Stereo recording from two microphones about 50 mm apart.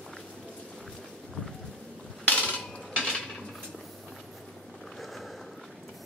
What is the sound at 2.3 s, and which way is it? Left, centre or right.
Cutlery, centre.